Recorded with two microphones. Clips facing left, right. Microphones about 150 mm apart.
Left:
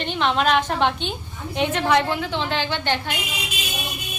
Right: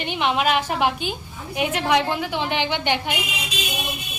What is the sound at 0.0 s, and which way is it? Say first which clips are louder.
A woman's voice: left 1 dB; 15° right (ahead or behind).